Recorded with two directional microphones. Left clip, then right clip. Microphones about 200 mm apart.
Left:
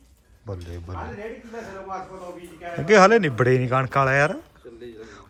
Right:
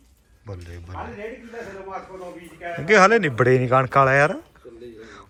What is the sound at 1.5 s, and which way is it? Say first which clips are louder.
Speech: left 2 dB; 45° right (ahead or behind).